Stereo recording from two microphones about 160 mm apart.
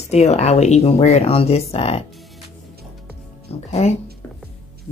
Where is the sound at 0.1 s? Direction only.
45° left (ahead or behind).